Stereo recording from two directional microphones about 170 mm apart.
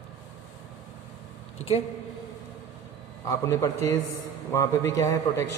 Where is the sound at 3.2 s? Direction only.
20° left (ahead or behind).